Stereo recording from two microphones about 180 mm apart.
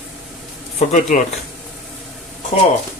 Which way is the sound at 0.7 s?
40° left (ahead or behind).